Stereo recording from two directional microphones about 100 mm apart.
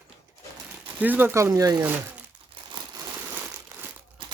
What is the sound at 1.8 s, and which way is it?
Speech, 15° right (ahead or behind).